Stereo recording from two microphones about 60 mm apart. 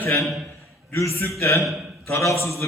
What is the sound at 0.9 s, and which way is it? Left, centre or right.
A man's voice, left.